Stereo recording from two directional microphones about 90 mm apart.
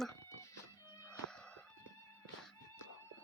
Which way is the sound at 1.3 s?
10° left (ahead or behind).